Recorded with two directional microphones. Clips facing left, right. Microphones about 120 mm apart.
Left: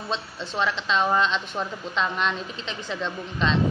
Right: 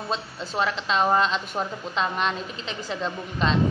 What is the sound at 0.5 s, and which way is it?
Speech, 40° right (ahead or behind).